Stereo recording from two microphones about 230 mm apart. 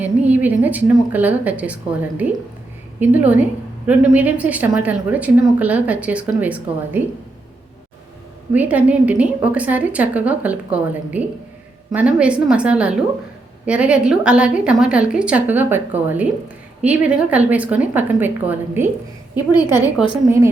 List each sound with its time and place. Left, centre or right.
0.0 s a woman's voice: centre
8.5 s a woman's voice: centre
19.5 s a woman's voice: centre